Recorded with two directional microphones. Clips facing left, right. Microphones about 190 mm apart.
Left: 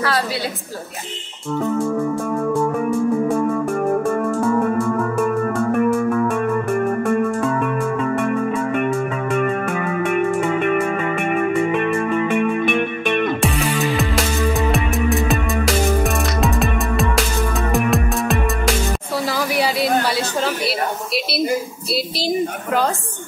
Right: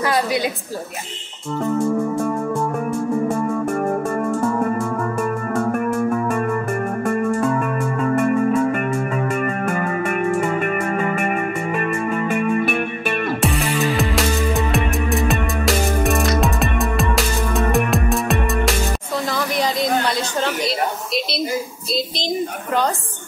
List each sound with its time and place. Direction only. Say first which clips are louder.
5.6 s music: left 1 dB; 5° right (ahead or behind)
15.2 s music: even; centre (ahead or behind)
19.3 s a sound: left 1 dB; 10° left (ahead or behind)